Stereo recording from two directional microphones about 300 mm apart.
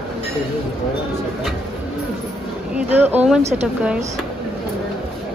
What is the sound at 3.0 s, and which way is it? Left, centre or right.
Speech, centre.